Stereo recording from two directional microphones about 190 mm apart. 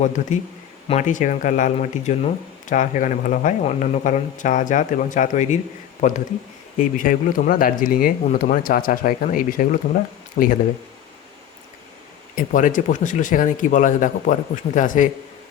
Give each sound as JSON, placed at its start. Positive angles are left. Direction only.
{"t": 0.9, "sound": "speech", "side_deg": 40}
{"t": 12.4, "sound": "speech", "side_deg": 45}